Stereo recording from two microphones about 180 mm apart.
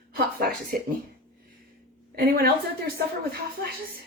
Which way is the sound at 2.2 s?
60° right (ahead or behind).